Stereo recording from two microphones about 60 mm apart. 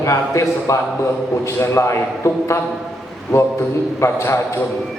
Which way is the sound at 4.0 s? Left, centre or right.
Left.